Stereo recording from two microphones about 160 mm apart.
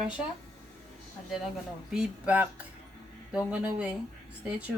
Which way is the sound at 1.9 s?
5° right (ahead or behind).